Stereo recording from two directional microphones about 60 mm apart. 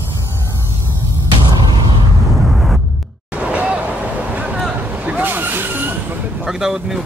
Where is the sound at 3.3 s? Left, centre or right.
Right.